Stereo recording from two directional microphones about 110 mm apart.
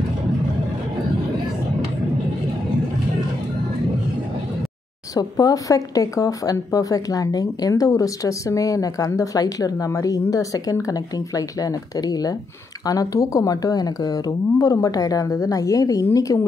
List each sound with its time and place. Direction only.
5.1 s speech: 35° left (ahead or behind)